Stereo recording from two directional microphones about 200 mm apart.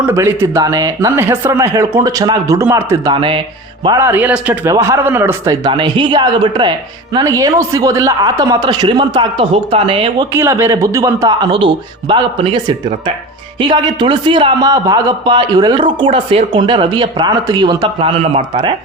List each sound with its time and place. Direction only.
0.0 s a man's voice: 15° right (ahead or behind)
10.3 s a man's voice: 15° right (ahead or behind)